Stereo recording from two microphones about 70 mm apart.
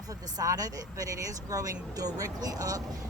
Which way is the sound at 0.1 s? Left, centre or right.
Right.